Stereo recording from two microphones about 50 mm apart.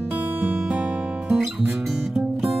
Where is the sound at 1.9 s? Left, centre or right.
Centre.